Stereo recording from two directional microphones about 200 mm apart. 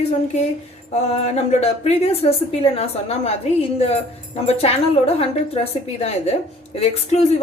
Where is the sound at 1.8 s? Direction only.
30° left (ahead or behind).